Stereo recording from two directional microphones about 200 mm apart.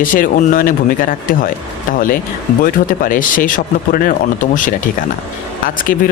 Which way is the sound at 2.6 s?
45° left (ahead or behind).